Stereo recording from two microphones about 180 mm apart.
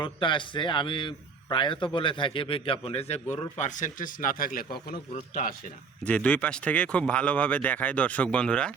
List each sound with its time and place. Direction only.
0.0 s a man's voice: 25° left (ahead or behind); by 5.5 s 45° left (ahead or behind)
6.1 s speech: 10° left (ahead or behind)